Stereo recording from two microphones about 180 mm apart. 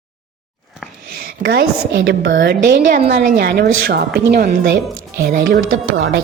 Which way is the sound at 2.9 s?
50° right (ahead or behind).